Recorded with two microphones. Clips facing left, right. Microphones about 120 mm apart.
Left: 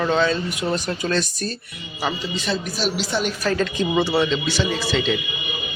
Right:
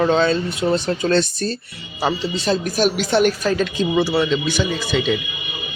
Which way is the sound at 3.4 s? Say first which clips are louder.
Right 2 dB; 20° right (ahead or behind).